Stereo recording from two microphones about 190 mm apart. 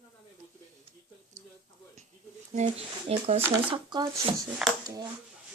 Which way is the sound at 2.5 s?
35° right (ahead or behind).